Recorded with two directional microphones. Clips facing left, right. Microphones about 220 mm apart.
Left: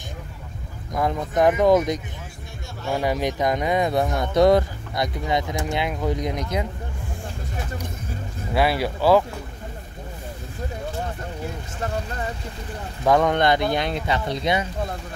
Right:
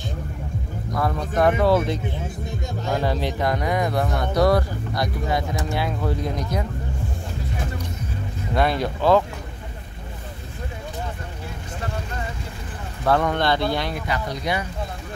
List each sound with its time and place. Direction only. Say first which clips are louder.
0.9 s speech: left 1 dB; 20° left (ahead or behind)
8.5 s speech: even; 5° left (ahead or behind)
13.0 s speech: left 2 dB; 15° left (ahead or behind)